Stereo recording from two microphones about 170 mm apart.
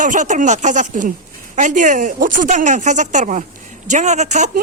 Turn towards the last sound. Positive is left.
turn(degrees=-45)  # may be behind; listen again after turning